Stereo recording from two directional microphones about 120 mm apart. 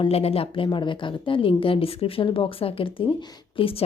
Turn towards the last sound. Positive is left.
turn(degrees=50)  # may be behind; listen again after turning